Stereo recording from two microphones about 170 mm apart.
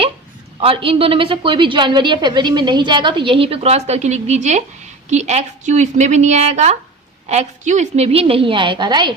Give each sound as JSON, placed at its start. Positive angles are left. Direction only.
{"t": 0.6, "sound": "a woman's voice", "side_deg": -35}